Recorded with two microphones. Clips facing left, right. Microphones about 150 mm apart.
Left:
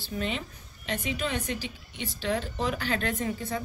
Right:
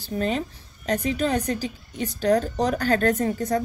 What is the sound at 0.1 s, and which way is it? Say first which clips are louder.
A woman's voice: right 7 dB; 40° right (ahead or behind).